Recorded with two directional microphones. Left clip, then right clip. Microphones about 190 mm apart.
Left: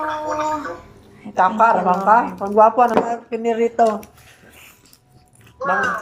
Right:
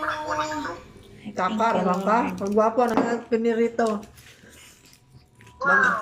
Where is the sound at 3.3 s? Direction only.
40° right (ahead or behind).